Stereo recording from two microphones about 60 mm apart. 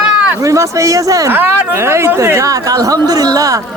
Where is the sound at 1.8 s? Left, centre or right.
Right.